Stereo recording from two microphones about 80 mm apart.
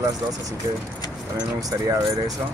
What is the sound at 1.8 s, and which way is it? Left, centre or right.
Speech, right.